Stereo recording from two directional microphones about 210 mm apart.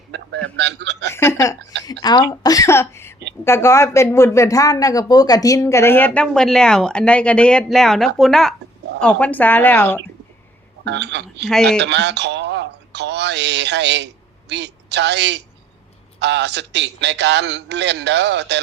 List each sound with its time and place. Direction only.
0.4 s a man's voice: 55° right (ahead or behind)
1.1 s a sound: 15° left (ahead or behind)
1.8 s a woman's voice: 20° left (ahead or behind)
10.8 s a man's voice: 55° right (ahead or behind)
11.4 s a man's voice: 5° left (ahead or behind)
11.8 s a woman's voice: 55° right (ahead or behind)